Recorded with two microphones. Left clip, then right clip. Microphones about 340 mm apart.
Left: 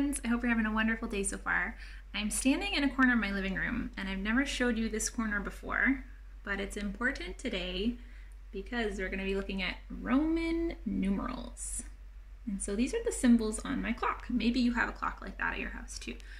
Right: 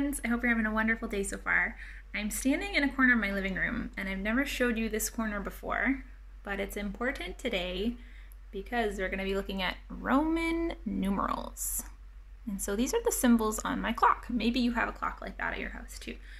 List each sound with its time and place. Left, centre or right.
0.2 s a woman's voice: centre
12.5 s a woman's voice: centre